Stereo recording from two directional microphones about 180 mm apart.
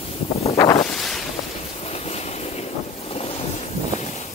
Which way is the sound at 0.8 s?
Centre (ahead or behind).